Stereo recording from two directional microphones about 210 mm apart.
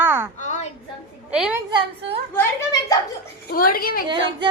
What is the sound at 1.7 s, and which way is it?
Speech, 20° right (ahead or behind).